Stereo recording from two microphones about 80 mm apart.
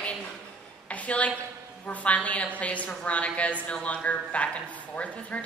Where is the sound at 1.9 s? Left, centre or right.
Centre.